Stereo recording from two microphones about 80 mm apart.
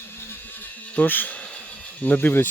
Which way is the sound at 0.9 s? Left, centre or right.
Left.